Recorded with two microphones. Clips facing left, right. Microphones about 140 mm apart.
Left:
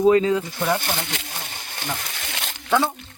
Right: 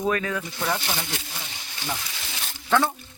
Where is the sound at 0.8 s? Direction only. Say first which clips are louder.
Left 2 dB; 55° left (ahead or behind).